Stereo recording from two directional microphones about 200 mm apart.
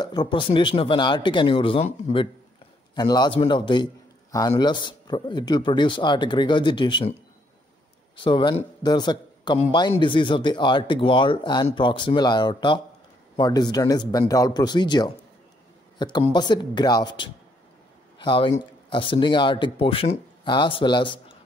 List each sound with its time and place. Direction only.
0.0 s a man's voice: 20° left (ahead or behind)
8.2 s a man's voice: 25° left (ahead or behind)